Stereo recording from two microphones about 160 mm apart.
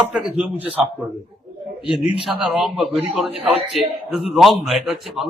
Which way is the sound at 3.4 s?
40° right (ahead or behind).